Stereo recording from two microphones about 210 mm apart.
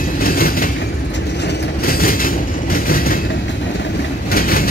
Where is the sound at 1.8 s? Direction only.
45° left (ahead or behind).